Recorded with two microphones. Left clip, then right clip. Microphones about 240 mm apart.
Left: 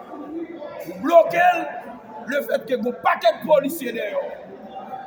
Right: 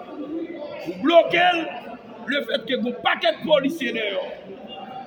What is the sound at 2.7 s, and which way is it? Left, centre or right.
Speech, centre.